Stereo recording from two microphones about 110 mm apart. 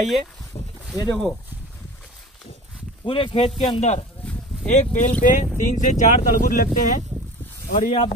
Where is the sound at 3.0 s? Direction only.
50° left (ahead or behind).